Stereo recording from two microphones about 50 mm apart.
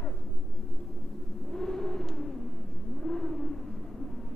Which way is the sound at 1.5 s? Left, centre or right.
Centre.